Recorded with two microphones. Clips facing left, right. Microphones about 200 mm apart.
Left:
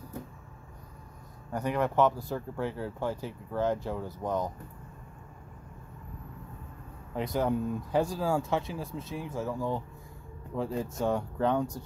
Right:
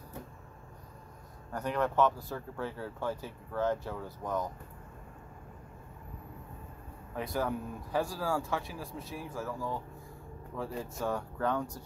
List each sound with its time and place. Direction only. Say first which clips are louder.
1.5 s speech: left 2 dB; 10° left (ahead or behind)
7.2 s speech: left 5 dB; 20° left (ahead or behind)